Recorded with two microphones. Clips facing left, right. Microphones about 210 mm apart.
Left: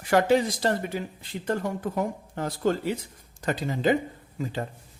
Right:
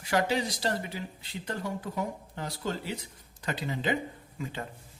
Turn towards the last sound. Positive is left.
turn(degrees=40)  # may be behind; listen again after turning